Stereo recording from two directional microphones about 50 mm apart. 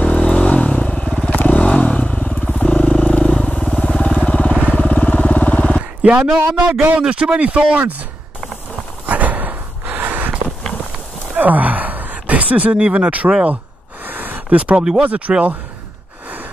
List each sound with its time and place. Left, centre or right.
0.0 s vehicle: left
1.3 s motorcycle: left
2.6 s vehicle: left
5.8 s a sound: right
6.7 s a man's voice: right
7.0 s speech: centre
9.0 s a sound: right
11.3 s speech: right
14.0 s a sound: right
14.5 s speech: right